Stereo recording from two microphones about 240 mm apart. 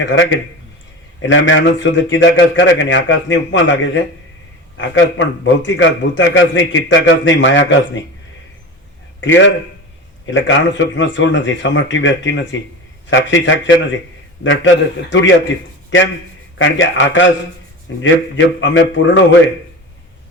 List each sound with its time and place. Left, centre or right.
0.0 s a man's voice: left
9.2 s a man's voice: left